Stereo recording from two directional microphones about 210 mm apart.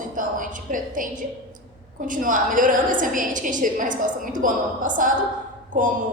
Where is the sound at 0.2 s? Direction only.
40° right (ahead or behind).